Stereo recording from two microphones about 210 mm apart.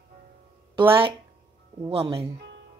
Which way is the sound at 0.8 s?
25° right (ahead or behind).